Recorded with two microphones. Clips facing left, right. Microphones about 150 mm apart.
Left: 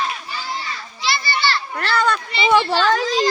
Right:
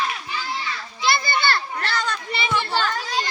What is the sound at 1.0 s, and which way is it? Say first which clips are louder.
Children playing: right 1 dB; 50° right (ahead or behind).